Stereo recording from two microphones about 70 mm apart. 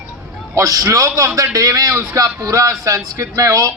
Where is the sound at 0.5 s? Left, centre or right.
Right.